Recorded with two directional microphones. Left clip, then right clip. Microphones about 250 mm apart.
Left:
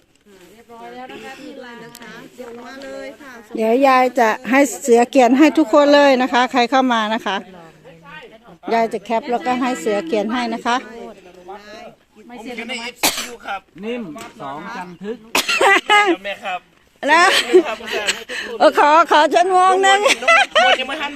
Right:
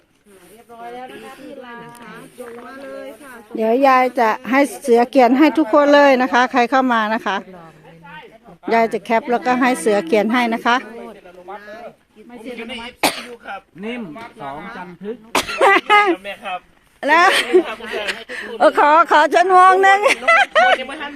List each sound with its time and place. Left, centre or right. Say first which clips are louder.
2.6 s speech: left 3 dB; centre
3.5 s speech: even; centre
8.7 s a woman's voice: right 2 dB; centre
12.3 s a sound: left 2 dB; centre
15.3 s speech: even; centre
17.0 s speech: even; centre
20.8 s speech: left 4 dB; left